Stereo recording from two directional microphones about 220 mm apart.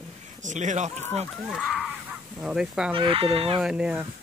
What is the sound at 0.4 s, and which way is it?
Speech, 35° right (ahead or behind).